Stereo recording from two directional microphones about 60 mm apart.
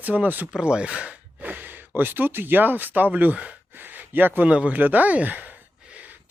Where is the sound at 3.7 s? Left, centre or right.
Right.